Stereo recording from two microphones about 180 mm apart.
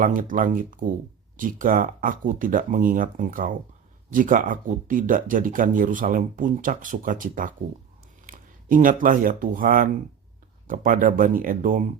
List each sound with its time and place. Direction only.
0.0 s speech: 50° right (ahead or behind)